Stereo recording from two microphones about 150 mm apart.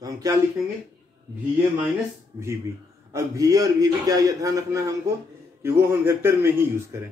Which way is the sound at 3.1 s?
20° right (ahead or behind).